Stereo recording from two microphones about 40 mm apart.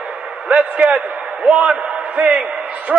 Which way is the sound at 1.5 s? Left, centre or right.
Right.